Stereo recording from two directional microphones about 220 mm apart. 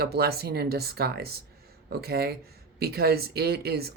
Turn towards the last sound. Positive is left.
turn(degrees=-45)  # may be behind; listen again after turning